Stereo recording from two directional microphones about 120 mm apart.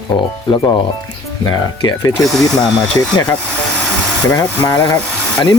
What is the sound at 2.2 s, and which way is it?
Speech, centre (ahead or behind).